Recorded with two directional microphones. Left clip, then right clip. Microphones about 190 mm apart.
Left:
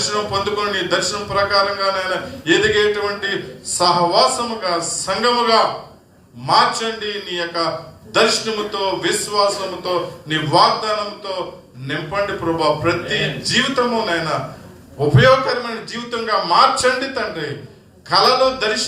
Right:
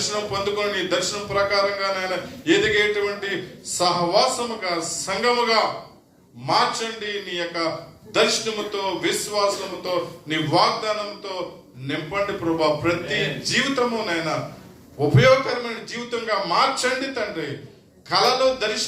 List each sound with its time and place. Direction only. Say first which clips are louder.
0.1 s a man's voice: left 5 dB; 40° right (ahead or behind)